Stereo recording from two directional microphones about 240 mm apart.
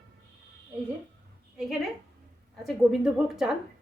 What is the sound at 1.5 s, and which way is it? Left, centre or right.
A woman's voice, centre.